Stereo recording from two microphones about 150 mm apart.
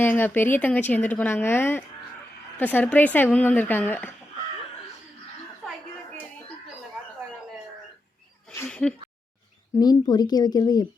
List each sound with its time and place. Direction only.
0.0 s speech: 15° left (ahead or behind)
8.5 s a sound: 10° left (ahead or behind)
9.7 s speech: 25° left (ahead or behind)